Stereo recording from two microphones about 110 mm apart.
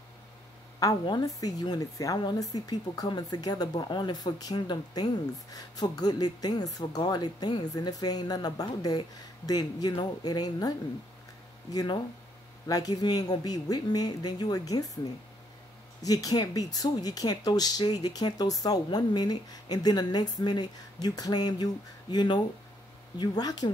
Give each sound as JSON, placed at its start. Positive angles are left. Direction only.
{"t": 1.0, "sound": "speech", "side_deg": 35}
{"t": 11.7, "sound": "speech", "side_deg": 40}
{"t": 16.0, "sound": "speech", "side_deg": 35}